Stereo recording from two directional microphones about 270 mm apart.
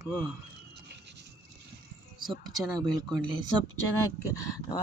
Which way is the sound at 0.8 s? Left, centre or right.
Right.